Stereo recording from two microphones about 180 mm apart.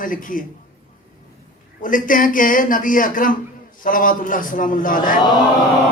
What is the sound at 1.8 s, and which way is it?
A man's voice, 50° left (ahead or behind).